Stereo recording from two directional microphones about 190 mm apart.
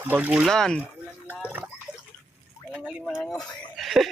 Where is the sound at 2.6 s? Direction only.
Centre (ahead or behind).